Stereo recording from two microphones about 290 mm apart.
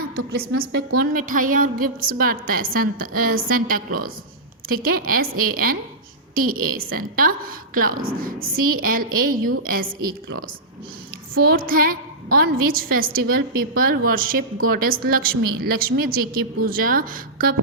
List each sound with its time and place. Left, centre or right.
0.3 s a woman's voice: right
11.3 s a woman's voice: right